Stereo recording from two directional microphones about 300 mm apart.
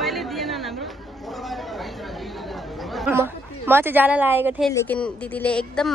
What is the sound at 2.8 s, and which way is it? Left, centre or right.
A woman's voice, centre.